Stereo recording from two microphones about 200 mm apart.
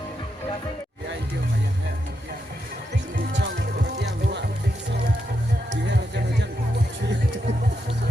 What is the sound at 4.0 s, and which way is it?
Music, 60° right (ahead or behind).